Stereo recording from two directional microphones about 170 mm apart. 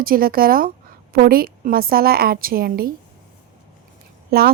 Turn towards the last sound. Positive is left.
turn(degrees=-65)  # may be behind; listen again after turning